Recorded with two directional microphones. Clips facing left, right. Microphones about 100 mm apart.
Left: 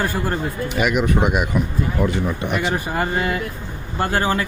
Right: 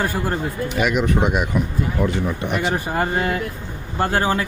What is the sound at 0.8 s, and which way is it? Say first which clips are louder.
Speech: left 1 dB; 5° left (ahead or behind).